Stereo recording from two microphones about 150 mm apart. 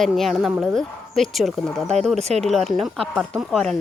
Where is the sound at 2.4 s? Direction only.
Centre (ahead or behind).